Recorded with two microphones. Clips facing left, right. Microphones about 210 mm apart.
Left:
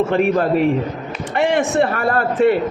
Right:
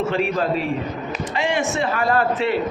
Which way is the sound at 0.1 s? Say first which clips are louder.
Left 5 dB; 55° left (ahead or behind).